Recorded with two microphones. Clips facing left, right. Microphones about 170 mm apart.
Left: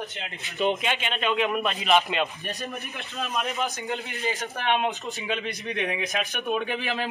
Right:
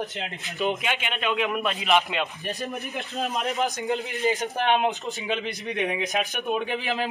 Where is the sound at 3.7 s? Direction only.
35° right (ahead or behind).